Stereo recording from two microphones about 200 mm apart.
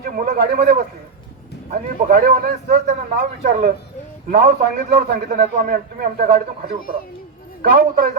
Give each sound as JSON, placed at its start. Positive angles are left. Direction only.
{"t": 0.0, "sound": "a sound", "side_deg": -50}
{"t": 1.7, "sound": "a man's voice", "side_deg": -45}
{"t": 7.6, "sound": "a man's voice", "side_deg": -50}